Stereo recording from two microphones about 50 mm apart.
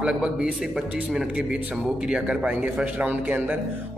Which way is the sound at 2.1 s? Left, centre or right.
Right.